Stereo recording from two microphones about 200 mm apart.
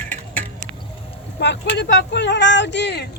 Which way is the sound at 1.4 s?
60° left (ahead or behind).